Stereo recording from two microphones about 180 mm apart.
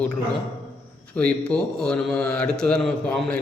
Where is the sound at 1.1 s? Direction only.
5° left (ahead or behind).